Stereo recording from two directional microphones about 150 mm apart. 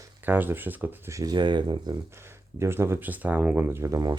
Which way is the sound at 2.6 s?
15° right (ahead or behind).